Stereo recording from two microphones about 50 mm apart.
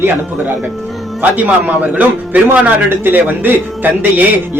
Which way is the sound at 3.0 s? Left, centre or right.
Right.